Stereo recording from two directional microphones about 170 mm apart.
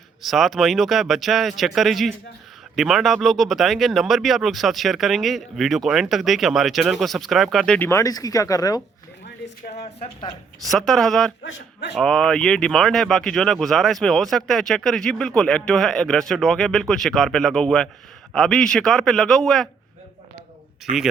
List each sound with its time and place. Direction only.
0.2 s speech: centre (ahead or behind)
7.8 s speech: 15° left (ahead or behind)
9.2 s a sound: 70° left (ahead or behind)
10.0 s speech: 25° left (ahead or behind)
10.7 s speech: centre (ahead or behind)
20.9 s speech: 45° right (ahead or behind)